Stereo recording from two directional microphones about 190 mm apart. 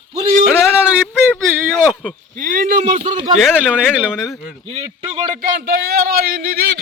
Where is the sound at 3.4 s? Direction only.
Centre (ahead or behind).